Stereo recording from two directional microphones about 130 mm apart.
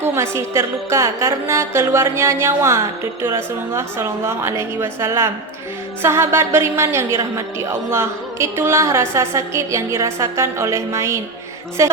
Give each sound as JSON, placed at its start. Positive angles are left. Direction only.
{"t": 0.0, "sound": "a woman's voice", "side_deg": -20}